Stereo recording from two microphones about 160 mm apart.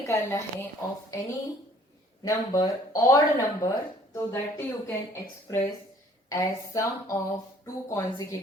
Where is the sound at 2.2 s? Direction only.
25° left (ahead or behind).